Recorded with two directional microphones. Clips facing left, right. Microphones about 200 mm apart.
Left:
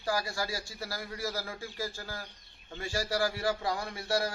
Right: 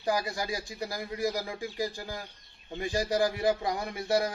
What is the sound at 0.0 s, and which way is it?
A man's voice, 20° right (ahead or behind).